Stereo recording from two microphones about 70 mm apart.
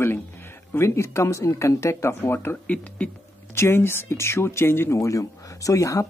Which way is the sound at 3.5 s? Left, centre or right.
Left.